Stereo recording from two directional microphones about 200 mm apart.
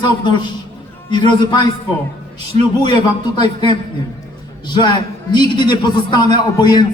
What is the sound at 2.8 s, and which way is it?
A man's voice, 20° left (ahead or behind).